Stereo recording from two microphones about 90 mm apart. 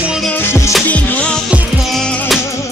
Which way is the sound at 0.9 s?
15° left (ahead or behind).